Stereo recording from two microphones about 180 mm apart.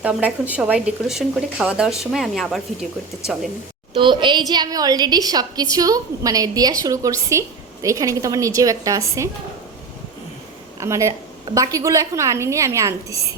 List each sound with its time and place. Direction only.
0.0 s speech: 5° right (ahead or behind)
3.9 s a woman's voice: 25° right (ahead or behind)
10.8 s a woman's voice: 15° right (ahead or behind)